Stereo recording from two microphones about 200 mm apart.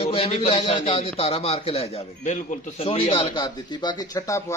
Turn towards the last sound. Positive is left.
turn(degrees=15)  # may be behind; listen again after turning